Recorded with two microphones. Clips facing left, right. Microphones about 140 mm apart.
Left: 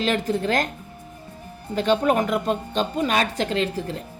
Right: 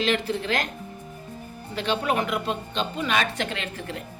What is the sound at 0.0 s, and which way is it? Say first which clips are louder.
Speech: left 2 dB; 45° left (ahead or behind).